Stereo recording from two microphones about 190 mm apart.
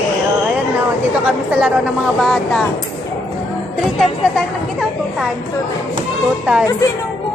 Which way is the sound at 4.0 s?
Centre (ahead or behind).